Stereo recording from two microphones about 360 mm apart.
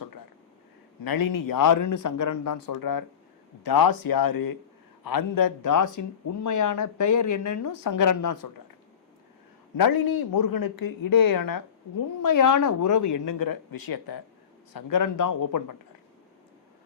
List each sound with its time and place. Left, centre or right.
1.0 s speech: left
9.7 s speech: left
14.7 s speech: left